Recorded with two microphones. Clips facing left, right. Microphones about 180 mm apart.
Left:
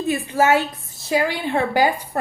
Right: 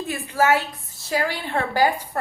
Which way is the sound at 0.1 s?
20° left (ahead or behind).